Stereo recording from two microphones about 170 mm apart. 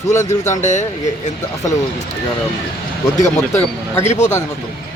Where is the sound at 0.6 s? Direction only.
45° left (ahead or behind).